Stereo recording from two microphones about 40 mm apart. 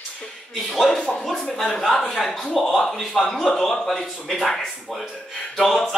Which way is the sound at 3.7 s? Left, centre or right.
Centre.